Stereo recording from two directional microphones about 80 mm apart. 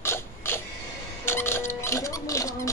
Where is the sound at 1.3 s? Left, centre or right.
Left.